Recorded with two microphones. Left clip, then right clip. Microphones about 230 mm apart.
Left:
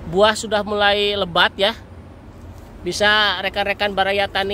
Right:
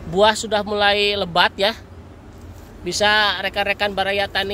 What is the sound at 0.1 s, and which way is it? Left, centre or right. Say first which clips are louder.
Speech: even; centre.